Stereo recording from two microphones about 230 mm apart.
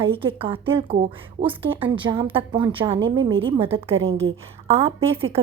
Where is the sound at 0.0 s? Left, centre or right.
Right.